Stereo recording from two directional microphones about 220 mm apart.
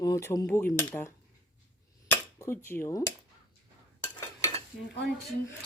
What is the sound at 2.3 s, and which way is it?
Speech, 10° left (ahead or behind).